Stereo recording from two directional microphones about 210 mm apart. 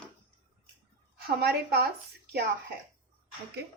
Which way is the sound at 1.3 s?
50° right (ahead or behind).